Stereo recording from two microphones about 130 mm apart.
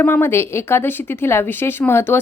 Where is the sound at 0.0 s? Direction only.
20° left (ahead or behind).